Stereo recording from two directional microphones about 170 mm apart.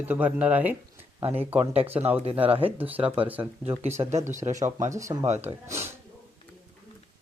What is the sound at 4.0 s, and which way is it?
Speech, 30° right (ahead or behind).